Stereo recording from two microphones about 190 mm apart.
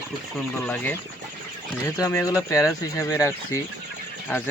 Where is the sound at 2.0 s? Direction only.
15° left (ahead or behind).